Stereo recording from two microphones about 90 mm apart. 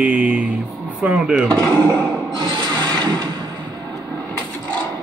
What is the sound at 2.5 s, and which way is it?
Rub, 55° right (ahead or behind).